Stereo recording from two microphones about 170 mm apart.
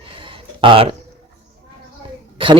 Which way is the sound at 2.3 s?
30° right (ahead or behind).